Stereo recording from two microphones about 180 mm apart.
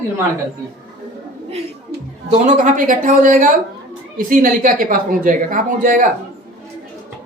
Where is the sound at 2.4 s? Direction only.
45° right (ahead or behind).